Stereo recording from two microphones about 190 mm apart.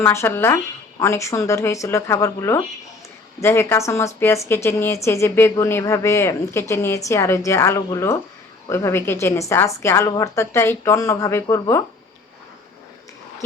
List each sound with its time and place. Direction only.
0.0 s a woman's voice: 10° left (ahead or behind)